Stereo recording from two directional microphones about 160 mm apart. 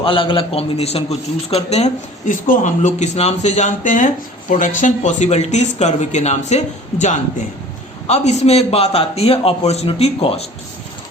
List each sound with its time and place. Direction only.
0.0 s a man's voice: 35° left (ahead or behind)
8.0 s a man's voice: 45° left (ahead or behind)